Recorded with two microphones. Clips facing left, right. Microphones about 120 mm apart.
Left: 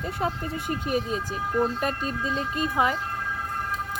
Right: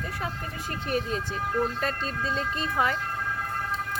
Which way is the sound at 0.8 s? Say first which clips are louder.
Right 1 dB; 10° left (ahead or behind).